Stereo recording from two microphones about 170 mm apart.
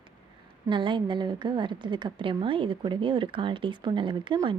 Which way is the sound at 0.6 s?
30° right (ahead or behind).